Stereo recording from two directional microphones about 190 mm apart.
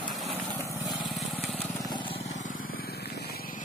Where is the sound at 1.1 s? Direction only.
Centre (ahead or behind).